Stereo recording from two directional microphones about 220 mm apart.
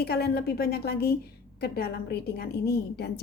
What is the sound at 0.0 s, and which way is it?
A woman's voice, 45° left (ahead or behind).